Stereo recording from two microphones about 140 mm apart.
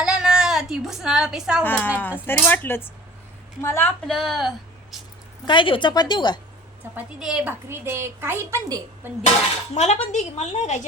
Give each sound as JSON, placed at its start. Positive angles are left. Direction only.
{"t": 0.0, "sound": "a sound", "side_deg": -5}
{"t": 1.6, "sound": "speech", "side_deg": 15}
{"t": 4.0, "sound": "speech", "side_deg": 0}
{"t": 5.5, "sound": "a woman's voice", "side_deg": 35}
{"t": 6.9, "sound": "a woman's voice", "side_deg": -5}
{"t": 7.7, "sound": "a woman's voice", "side_deg": -15}
{"t": 9.7, "sound": "a woman's voice", "side_deg": 55}